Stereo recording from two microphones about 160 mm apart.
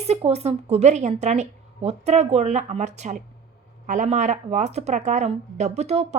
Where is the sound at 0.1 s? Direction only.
40° right (ahead or behind).